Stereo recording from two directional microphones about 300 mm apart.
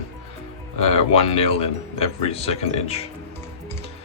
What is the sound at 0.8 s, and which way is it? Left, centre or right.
Speech, centre.